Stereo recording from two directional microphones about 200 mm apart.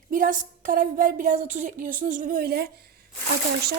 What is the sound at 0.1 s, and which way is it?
A woman's voice, 40° right (ahead or behind).